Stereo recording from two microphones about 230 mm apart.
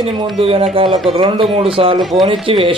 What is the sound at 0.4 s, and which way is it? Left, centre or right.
Speech, right.